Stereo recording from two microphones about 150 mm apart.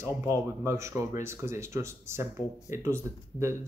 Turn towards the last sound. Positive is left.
turn(degrees=-15)  # may be behind; listen again after turning